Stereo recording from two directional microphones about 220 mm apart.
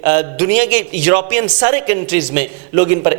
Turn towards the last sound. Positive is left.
turn(degrees=-15)  # may be behind; listen again after turning